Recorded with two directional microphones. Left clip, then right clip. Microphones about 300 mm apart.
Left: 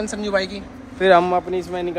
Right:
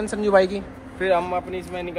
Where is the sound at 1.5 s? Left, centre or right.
Centre.